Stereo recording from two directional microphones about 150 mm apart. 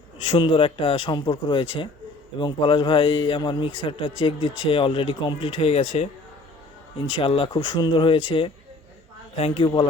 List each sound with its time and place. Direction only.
0.3 s a man's voice: 35° left (ahead or behind)
7.1 s a man's voice: 35° left (ahead or behind)